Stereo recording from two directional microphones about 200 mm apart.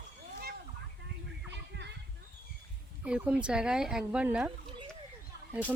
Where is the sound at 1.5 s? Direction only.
60° right (ahead or behind).